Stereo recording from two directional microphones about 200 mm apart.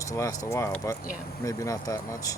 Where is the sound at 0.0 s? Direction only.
15° left (ahead or behind).